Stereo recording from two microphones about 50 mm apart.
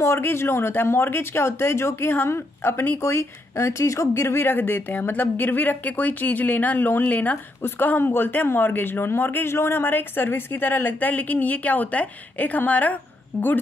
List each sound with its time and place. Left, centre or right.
0.0 s speech: left
3.0 s speech: left
4.2 s speech: left
8.0 s speech: left